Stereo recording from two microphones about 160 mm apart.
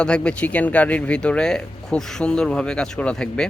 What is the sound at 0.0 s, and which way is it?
A man's voice, 5° left (ahead or behind).